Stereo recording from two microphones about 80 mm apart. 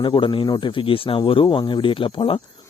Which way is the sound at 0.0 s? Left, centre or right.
Left.